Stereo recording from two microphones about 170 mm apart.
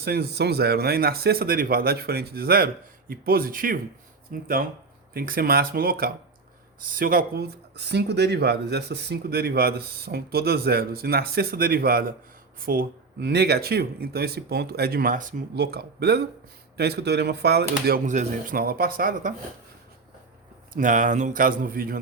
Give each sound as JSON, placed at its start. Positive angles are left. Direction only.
{"t": 0.0, "sound": "speech", "side_deg": -70}
{"t": 15.5, "sound": "speech", "side_deg": -70}
{"t": 18.0, "sound": "speech", "side_deg": -45}
{"t": 20.7, "sound": "speech", "side_deg": -50}